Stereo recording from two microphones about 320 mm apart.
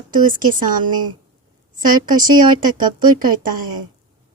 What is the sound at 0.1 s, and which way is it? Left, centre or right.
Speech, right.